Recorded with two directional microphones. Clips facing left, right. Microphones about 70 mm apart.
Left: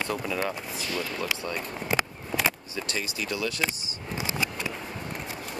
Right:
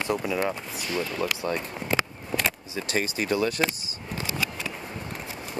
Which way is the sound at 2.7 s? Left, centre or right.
Right.